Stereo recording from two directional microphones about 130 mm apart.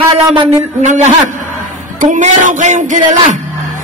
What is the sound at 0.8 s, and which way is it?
Speech, 65° right (ahead or behind).